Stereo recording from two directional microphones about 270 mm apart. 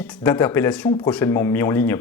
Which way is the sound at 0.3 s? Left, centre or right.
Centre.